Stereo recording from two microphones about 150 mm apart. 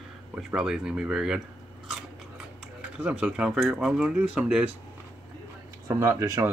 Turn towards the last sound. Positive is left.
turn(degrees=-15)  # may be behind; listen again after turning